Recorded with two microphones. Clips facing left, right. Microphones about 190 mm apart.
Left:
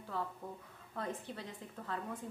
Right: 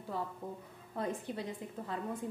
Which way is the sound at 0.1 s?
15° right (ahead or behind).